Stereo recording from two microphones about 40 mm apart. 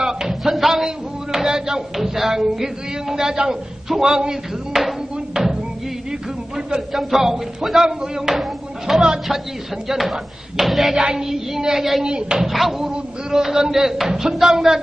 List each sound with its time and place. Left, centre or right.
0.0 s music: centre
2.0 s a man's voice: centre
5.3 s a sound: centre
6.9 s a man's voice: centre
11.0 s a man's voice: centre
12.0 s speech: centre
12.4 s a man's voice: centre